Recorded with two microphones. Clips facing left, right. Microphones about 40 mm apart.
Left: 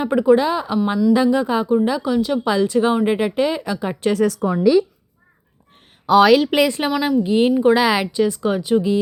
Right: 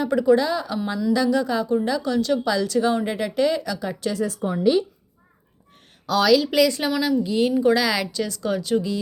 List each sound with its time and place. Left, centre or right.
0.0 s speech: left
2.4 s speech: left
4.1 s speech: left
6.1 s speech: left